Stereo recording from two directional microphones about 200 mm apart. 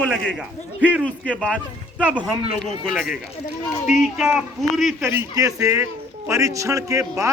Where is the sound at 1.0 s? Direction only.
5° left (ahead or behind).